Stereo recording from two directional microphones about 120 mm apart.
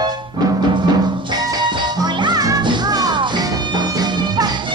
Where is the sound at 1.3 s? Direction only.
35° right (ahead or behind).